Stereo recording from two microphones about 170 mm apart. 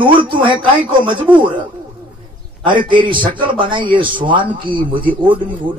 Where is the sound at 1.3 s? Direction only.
10° right (ahead or behind).